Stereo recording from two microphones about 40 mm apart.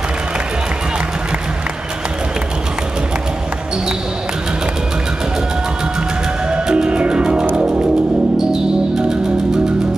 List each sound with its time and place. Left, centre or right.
6.5 s music: right
8.4 s music: centre